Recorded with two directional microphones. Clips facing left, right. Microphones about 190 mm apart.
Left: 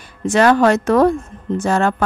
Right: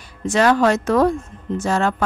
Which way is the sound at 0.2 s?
55° left (ahead or behind).